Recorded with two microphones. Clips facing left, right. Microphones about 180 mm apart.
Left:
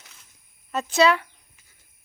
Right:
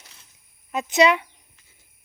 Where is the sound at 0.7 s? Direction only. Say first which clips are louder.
Right 1 dB; 15° right (ahead or behind).